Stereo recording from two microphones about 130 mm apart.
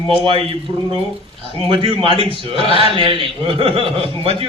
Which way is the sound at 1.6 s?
40° right (ahead or behind).